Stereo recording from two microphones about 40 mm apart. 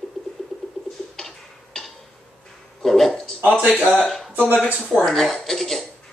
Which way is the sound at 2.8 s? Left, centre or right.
Centre.